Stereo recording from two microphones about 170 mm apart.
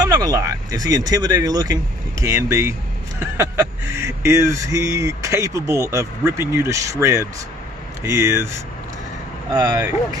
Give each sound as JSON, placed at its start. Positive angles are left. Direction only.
{"t": 0.0, "sound": "speech", "side_deg": -20}
{"t": 9.5, "sound": "speech", "side_deg": -20}